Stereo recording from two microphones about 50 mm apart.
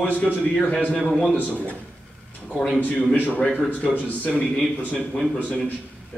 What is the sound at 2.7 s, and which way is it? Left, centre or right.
Speech, left.